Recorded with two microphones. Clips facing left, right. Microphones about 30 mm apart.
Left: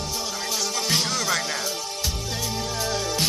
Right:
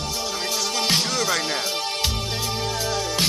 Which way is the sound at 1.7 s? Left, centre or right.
Right.